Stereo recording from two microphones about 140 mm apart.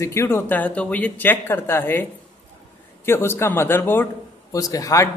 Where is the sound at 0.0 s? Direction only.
20° left (ahead or behind).